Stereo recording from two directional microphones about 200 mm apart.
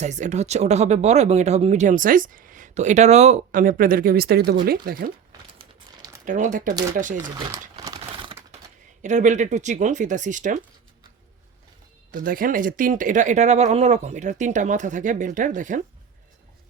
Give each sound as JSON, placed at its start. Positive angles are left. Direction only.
{"t": 0.0, "sound": "speech", "side_deg": -35}
{"t": 5.5, "sound": "crumpling", "side_deg": -20}
{"t": 6.2, "sound": "speech", "side_deg": -40}
{"t": 7.3, "sound": "speech", "side_deg": -20}
{"t": 7.8, "sound": "typing", "side_deg": -20}
{"t": 9.0, "sound": "speech", "side_deg": -35}
{"t": 12.1, "sound": "speech", "side_deg": -45}